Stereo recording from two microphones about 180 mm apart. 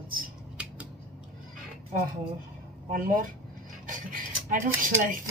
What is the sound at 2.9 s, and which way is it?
Speech, 50° right (ahead or behind).